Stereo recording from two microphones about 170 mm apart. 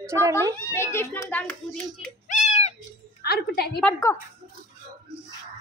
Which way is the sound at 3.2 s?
70° left (ahead or behind).